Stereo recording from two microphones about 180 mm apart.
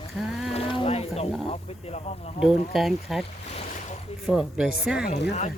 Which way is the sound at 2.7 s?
Centre (ahead or behind).